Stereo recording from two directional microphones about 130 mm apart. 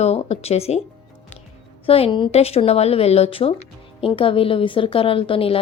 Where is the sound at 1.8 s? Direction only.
45° left (ahead or behind).